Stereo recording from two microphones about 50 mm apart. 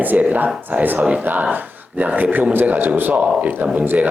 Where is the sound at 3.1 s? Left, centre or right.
Right.